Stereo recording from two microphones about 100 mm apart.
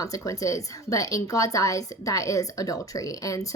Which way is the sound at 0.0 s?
35° left (ahead or behind).